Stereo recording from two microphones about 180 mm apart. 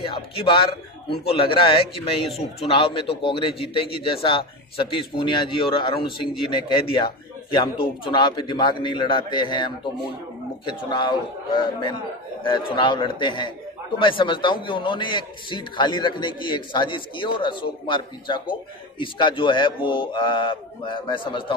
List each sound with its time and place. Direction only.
0.0 s a man's voice: 30° left (ahead or behind)